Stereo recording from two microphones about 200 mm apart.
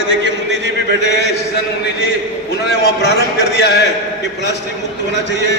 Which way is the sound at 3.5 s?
55° left (ahead or behind).